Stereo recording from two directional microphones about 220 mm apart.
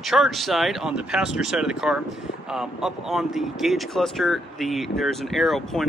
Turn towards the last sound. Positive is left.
turn(degrees=0)  # may be behind; listen again after turning